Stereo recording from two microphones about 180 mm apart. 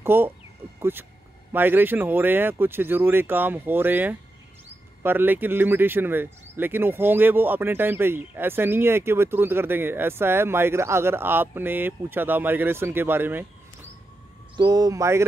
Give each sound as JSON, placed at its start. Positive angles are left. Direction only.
{"t": 0.0, "sound": "speech", "side_deg": -10}
{"t": 14.6, "sound": "speech", "side_deg": -20}